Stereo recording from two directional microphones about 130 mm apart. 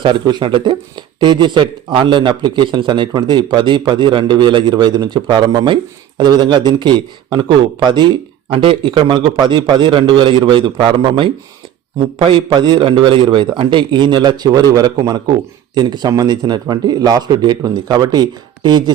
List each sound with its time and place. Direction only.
0.0 s speech: 35° right (ahead or behind)